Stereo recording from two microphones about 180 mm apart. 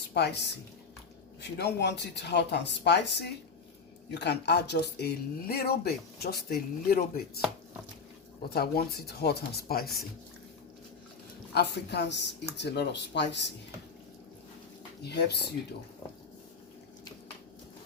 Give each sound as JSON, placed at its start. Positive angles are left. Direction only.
{"t": 0.1, "sound": "speech", "side_deg": 65}
{"t": 8.4, "sound": "speech", "side_deg": 60}
{"t": 11.5, "sound": "speech", "side_deg": 65}
{"t": 15.0, "sound": "speech", "side_deg": 65}